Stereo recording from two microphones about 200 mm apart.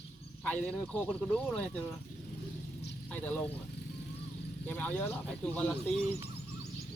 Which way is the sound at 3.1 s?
5° left (ahead or behind).